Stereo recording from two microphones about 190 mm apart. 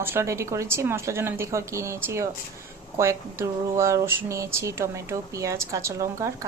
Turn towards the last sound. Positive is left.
turn(degrees=-15)  # may be behind; listen again after turning